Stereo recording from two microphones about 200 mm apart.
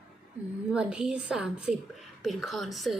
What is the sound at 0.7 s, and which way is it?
Speech, 5° right (ahead or behind).